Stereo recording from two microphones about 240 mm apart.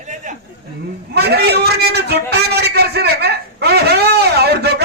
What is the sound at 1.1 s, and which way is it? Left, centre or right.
A man's voice, right.